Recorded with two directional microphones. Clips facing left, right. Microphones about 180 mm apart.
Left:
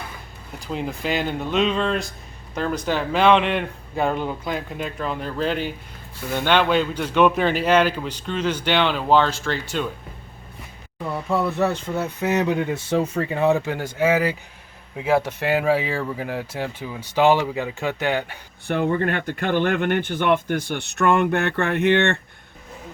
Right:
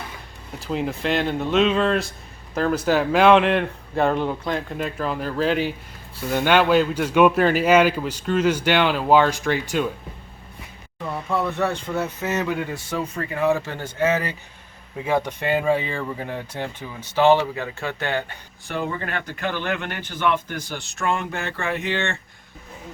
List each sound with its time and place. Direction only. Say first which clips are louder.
0.6 s a man's voice: right 2 dB; centre (ahead or behind)
11.4 s speech: left 2 dB; 5° left (ahead or behind)
18.7 s speech: left 6 dB; 55° left (ahead or behind)